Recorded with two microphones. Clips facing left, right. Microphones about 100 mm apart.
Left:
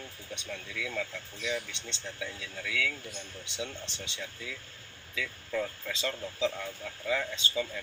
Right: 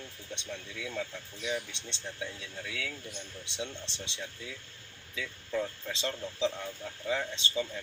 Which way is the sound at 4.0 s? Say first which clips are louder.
Right 1 dB; 30° right (ahead or behind).